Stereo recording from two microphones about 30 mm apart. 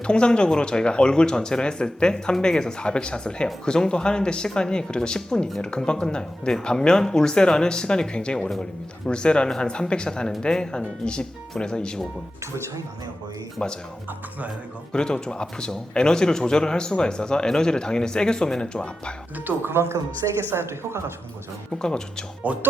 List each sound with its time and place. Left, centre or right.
0.0 s speech: left
13.6 s speech: left
14.1 s speech: right
14.9 s speech: left
19.5 s speech: right
21.8 s speech: left
22.5 s speech: right